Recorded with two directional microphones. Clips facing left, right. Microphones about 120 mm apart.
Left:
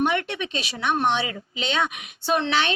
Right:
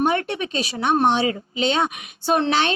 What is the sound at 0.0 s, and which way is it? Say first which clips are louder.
Speech: right 3 dB; 40° right (ahead or behind).